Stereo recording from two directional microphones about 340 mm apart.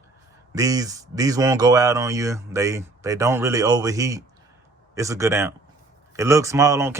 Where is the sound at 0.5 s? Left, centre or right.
Centre.